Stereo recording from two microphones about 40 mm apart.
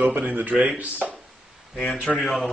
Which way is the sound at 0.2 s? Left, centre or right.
Right.